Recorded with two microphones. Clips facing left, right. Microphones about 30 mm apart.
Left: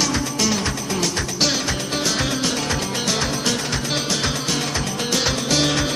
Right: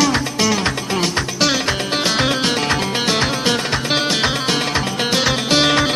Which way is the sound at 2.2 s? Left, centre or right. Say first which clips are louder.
Right 5 dB; right.